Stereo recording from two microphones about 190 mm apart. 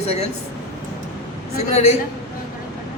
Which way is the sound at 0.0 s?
35° left (ahead or behind).